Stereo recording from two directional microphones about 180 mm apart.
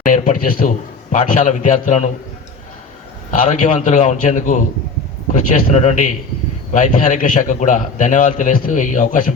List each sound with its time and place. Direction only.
0.0 s a man's voice: 45° left (ahead or behind)
3.3 s a man's voice: 45° left (ahead or behind)